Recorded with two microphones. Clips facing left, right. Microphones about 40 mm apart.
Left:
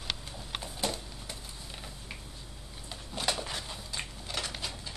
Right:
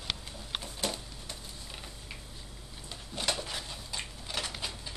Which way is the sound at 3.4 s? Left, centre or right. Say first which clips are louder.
Left 1 dB; centre.